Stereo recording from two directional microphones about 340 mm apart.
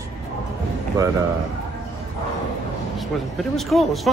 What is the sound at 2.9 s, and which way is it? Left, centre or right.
A man's voice, centre.